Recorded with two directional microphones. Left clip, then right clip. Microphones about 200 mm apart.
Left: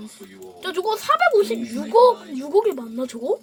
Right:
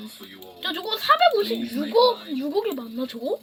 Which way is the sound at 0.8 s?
60° left (ahead or behind).